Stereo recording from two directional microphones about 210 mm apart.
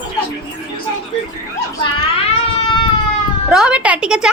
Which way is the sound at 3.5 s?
5° right (ahead or behind).